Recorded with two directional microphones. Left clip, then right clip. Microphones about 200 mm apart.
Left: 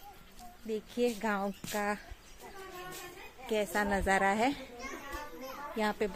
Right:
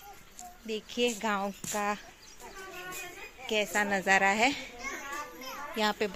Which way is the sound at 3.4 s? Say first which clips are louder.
Right 3 dB; 10° left (ahead or behind).